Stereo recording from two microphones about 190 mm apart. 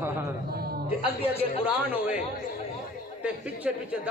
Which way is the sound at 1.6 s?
10° right (ahead or behind).